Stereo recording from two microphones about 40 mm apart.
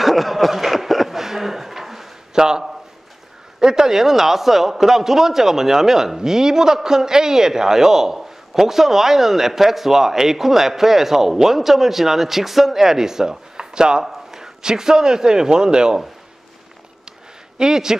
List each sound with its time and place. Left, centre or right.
0.0 s chuckle: centre
3.6 s a man's voice: centre
17.6 s speech: centre